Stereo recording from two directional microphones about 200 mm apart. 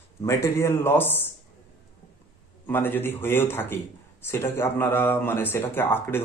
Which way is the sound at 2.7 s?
10° left (ahead or behind).